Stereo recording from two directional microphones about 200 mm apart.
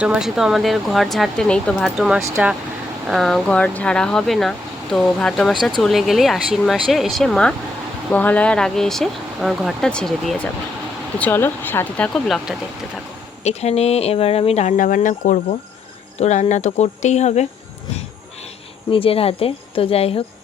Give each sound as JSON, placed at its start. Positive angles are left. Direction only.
{"t": 0.0, "sound": "speech", "side_deg": -5}
{"t": 13.4, "sound": "speech", "side_deg": 35}
{"t": 18.9, "sound": "speech", "side_deg": 25}